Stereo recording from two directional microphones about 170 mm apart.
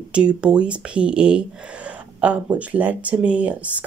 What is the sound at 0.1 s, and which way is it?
Speech, 5° right (ahead or behind).